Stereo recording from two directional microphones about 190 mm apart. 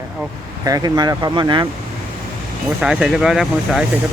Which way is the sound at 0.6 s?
20° right (ahead or behind).